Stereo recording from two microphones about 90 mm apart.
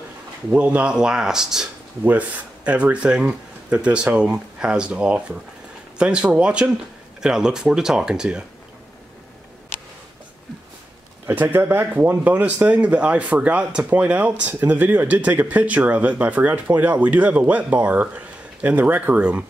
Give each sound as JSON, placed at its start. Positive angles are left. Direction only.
{"t": 0.5, "sound": "speech", "side_deg": -15}
{"t": 2.0, "sound": "speech", "side_deg": -15}
{"t": 11.2, "sound": "speech", "side_deg": -25}